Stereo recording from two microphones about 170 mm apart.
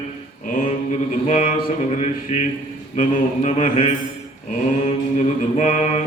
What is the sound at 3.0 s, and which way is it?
Speech, 45° left (ahead or behind).